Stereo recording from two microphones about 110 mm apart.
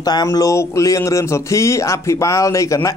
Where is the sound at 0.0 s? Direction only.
35° left (ahead or behind).